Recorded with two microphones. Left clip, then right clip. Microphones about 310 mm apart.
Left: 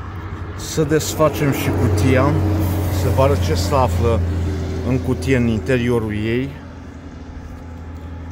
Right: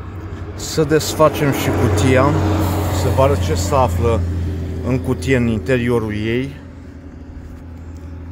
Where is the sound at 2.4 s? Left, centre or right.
Right.